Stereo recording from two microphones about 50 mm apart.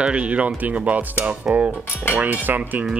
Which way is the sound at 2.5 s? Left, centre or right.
Right.